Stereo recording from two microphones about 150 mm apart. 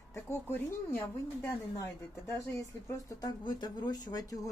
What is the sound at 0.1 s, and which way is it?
Speech, 15° left (ahead or behind).